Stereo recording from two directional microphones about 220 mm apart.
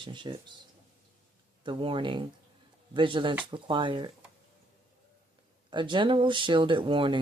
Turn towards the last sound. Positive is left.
turn(degrees=-20)  # may be behind; listen again after turning